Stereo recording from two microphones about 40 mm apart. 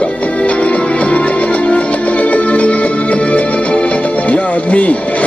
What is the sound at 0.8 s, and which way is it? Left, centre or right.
Music, left.